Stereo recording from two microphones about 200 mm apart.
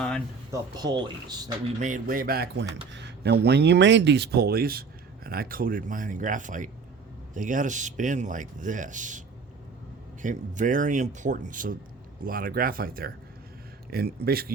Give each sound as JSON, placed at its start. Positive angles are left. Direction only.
{"t": 0.8, "sound": "speech", "side_deg": -20}
{"t": 1.8, "sound": "speech", "side_deg": -40}